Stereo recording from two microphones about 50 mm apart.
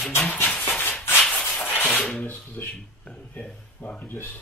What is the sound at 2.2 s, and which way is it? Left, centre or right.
Speech, left.